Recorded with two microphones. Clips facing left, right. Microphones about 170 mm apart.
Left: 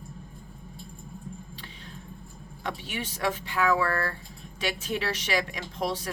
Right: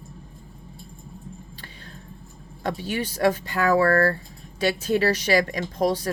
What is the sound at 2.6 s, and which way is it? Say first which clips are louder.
Speech: right 7 dB; 40° right (ahead or behind).